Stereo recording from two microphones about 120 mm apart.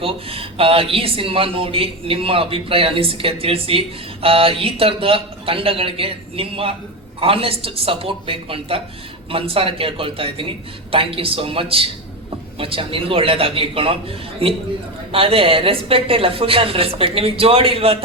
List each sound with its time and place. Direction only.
0.0 s speech: 50° right (ahead or behind)